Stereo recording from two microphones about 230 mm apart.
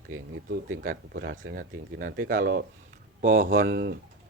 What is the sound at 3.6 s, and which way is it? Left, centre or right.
Speech, right.